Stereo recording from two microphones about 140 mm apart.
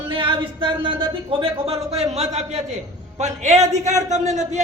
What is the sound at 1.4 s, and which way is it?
A man's voice, 45° right (ahead or behind).